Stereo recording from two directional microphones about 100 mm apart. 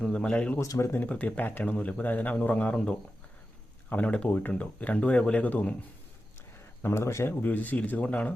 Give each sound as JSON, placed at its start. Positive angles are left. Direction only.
{"t": 0.0, "sound": "a man's voice", "side_deg": 10}
{"t": 0.6, "sound": "speech", "side_deg": 30}
{"t": 0.9, "sound": "a man's voice", "side_deg": 15}
{"t": 6.8, "sound": "speech", "side_deg": 25}
{"t": 7.4, "sound": "a man's voice", "side_deg": 15}